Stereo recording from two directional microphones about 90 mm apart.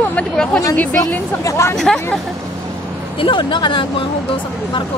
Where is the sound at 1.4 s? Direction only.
35° left (ahead or behind).